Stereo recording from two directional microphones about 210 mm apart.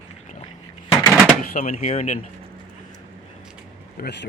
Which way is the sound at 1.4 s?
40° left (ahead or behind).